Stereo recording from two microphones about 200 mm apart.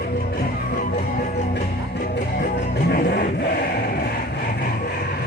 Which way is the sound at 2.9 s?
55° left (ahead or behind).